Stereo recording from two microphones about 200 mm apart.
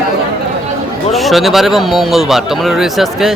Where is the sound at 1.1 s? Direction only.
Centre (ahead or behind).